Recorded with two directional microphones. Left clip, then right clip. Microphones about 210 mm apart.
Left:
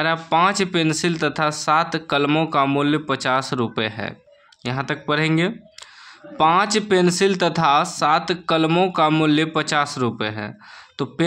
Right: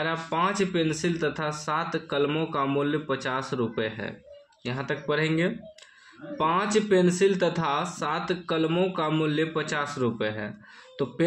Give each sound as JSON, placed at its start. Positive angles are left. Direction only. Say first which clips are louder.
{"t": 0.0, "sound": "speech", "louder": "left 9 dB", "side_deg": 45}